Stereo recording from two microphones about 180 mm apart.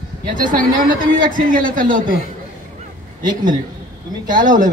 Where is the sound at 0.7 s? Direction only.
50° right (ahead or behind).